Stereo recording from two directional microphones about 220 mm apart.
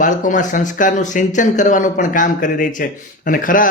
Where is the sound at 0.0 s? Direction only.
35° left (ahead or behind).